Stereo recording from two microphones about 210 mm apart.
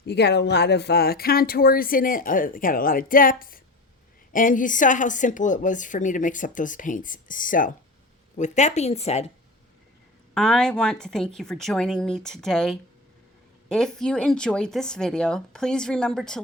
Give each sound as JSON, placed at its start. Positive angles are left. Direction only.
{"t": 0.0, "sound": "speech", "side_deg": 55}
{"t": 10.3, "sound": "speech", "side_deg": 5}